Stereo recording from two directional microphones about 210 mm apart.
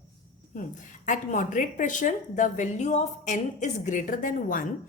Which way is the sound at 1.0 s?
40° left (ahead or behind).